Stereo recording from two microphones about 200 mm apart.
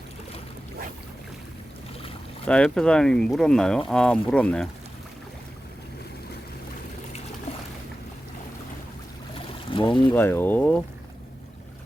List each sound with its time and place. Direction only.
2.5 s speech: 5° left (ahead or behind)
9.3 s boat: 25° left (ahead or behind)
10.1 s speech: 10° left (ahead or behind)